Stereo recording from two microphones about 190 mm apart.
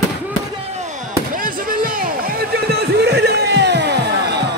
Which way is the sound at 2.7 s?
60° right (ahead or behind).